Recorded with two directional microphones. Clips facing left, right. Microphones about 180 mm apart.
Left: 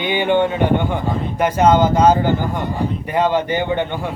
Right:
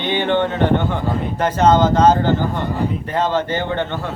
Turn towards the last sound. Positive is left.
turn(degrees=15)  # may be behind; listen again after turning